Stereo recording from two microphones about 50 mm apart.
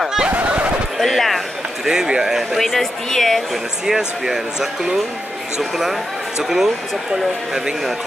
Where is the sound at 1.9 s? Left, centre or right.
Centre.